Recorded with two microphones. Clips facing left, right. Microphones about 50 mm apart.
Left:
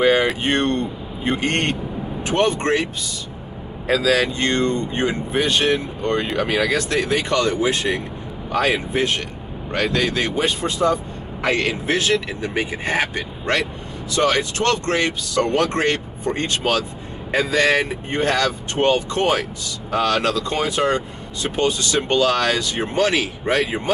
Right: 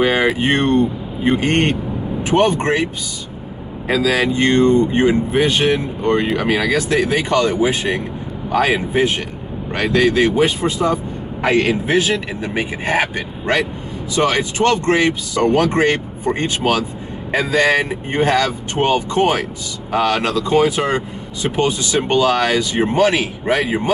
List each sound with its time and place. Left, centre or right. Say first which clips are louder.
0.0 s speech: right 1 dB; centre
4.0 s speech: right 4 dB; centre
20.8 s speech: even; centre